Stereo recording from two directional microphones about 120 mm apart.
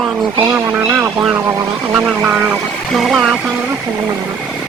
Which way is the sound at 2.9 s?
5° right (ahead or behind).